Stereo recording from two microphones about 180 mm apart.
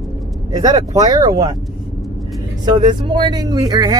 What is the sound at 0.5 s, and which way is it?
Speech, 35° right (ahead or behind).